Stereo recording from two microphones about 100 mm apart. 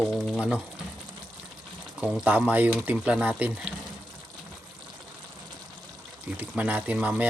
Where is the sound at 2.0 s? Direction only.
10° right (ahead or behind).